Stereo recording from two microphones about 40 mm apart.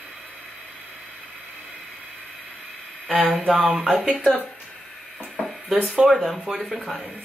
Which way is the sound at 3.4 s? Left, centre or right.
Right.